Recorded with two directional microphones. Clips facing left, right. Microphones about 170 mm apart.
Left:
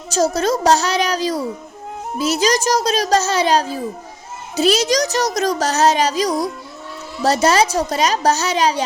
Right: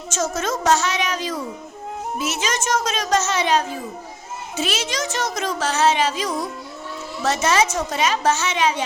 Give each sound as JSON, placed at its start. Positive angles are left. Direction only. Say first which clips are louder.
{"t": 0.3, "sound": "a child's voice", "louder": "left 2 dB", "side_deg": 35}